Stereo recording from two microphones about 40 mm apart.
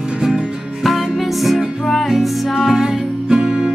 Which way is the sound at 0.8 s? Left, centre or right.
Centre.